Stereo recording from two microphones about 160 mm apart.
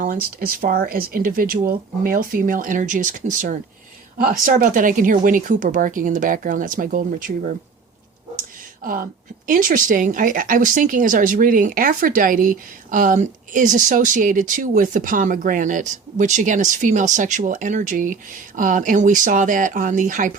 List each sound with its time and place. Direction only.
0.0 s speech: 60° right (ahead or behind)
8.8 s speech: 60° right (ahead or behind)